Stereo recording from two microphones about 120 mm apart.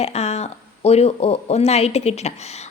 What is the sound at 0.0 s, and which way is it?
A woman's voice, 60° left (ahead or behind).